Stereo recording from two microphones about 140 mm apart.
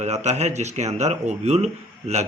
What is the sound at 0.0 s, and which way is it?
Speech, 55° right (ahead or behind).